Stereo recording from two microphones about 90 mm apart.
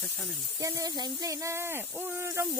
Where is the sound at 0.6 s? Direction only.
40° right (ahead or behind).